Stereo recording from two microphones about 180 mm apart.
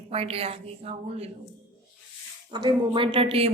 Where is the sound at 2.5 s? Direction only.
25° right (ahead or behind).